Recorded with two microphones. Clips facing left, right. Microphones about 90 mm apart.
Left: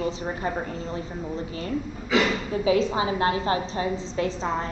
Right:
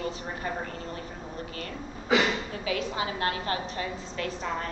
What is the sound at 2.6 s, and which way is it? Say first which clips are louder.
A woman's voice: left 9 dB; 25° left (ahead or behind).